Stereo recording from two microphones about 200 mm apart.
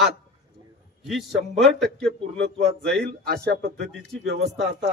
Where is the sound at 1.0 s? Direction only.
Centre (ahead or behind).